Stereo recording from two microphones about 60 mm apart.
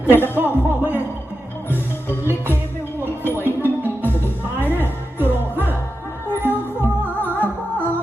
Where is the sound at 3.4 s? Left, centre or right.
Left.